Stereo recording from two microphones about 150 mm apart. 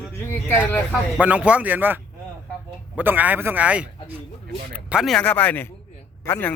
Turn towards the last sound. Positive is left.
turn(degrees=10)  # may be behind; listen again after turning